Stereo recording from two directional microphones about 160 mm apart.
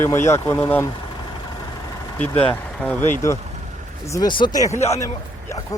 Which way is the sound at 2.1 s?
10° left (ahead or behind).